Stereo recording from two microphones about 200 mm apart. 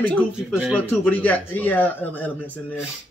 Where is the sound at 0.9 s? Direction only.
10° left (ahead or behind).